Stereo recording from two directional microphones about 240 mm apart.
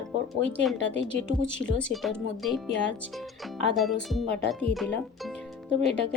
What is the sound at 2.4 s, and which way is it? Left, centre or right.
Speech, centre.